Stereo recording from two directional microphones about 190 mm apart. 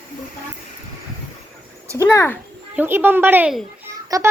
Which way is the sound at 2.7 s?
10° right (ahead or behind).